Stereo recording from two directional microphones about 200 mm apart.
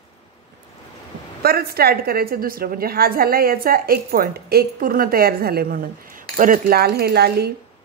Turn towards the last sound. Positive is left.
turn(degrees=-55)  # may be behind; listen again after turning